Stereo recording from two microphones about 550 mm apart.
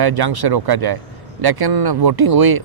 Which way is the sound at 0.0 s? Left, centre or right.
Right.